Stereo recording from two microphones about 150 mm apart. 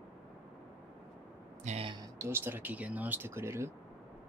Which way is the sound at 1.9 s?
25° right (ahead or behind).